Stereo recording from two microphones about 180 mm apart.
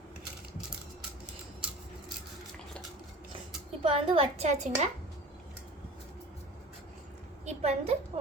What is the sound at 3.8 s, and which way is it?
A woman's voice, 30° right (ahead or behind).